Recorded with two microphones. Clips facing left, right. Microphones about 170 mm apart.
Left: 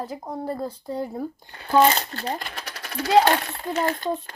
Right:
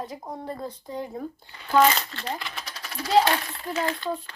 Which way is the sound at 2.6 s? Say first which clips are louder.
Left 4 dB; 65° left (ahead or behind).